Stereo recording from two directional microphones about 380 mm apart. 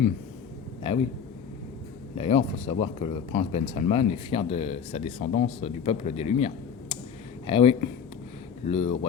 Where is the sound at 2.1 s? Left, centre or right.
Centre.